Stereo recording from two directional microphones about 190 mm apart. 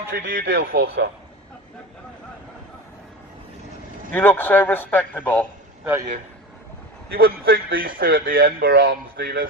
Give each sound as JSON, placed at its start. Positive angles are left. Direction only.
{"t": 0.1, "sound": "a man's voice", "side_deg": -55}
{"t": 4.1, "sound": "a man's voice", "side_deg": 10}
{"t": 5.8, "sound": "a man's voice", "side_deg": -10}
{"t": 7.1, "sound": "a man's voice", "side_deg": -55}